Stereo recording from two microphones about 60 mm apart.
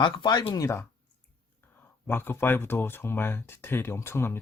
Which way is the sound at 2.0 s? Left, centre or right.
Left.